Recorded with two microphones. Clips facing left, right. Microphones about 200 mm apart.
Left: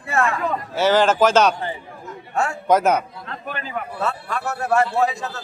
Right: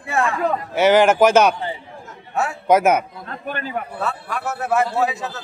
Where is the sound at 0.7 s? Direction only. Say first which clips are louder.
Right 3 dB; 15° right (ahead or behind).